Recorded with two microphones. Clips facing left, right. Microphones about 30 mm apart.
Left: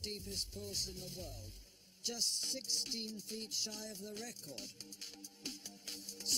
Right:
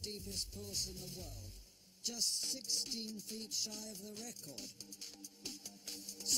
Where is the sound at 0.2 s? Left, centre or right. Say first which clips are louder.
Left 2 dB; centre.